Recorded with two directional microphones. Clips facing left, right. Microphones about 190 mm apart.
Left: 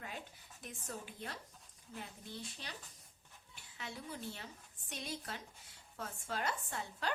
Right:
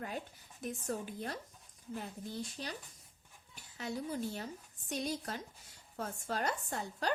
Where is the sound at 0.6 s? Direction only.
45° right (ahead or behind).